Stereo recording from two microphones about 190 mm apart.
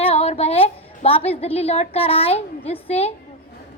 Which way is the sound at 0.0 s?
30° left (ahead or behind).